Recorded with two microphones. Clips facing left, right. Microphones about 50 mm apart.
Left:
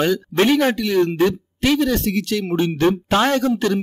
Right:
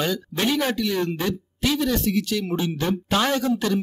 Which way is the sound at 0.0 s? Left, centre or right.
Left.